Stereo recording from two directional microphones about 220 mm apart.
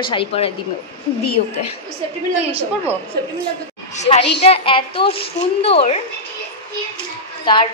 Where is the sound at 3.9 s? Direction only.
30° left (ahead or behind).